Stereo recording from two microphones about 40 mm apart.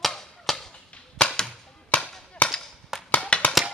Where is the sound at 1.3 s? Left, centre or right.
Centre.